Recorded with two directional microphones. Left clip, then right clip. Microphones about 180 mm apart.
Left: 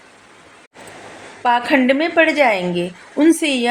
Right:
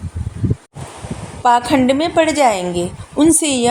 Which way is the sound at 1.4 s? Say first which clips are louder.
Right 2 dB; 35° right (ahead or behind).